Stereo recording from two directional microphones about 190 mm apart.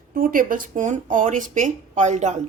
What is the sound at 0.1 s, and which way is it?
A woman's voice, 45° right (ahead or behind).